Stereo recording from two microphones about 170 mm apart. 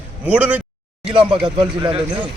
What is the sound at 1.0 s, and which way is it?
Speech, 30° right (ahead or behind).